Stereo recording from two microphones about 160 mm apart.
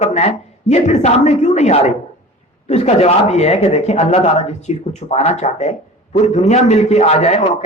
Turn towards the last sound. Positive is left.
turn(degrees=40)  # may be behind; listen again after turning